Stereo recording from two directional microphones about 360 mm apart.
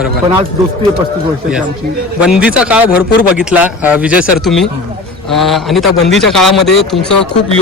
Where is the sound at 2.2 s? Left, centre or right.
Centre.